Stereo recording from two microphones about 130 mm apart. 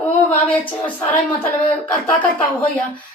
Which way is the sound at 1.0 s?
15° left (ahead or behind).